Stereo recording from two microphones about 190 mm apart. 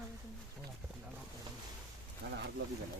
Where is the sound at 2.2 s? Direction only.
55° right (ahead or behind).